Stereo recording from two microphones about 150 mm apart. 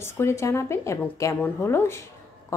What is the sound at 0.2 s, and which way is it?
Speech, 20° left (ahead or behind).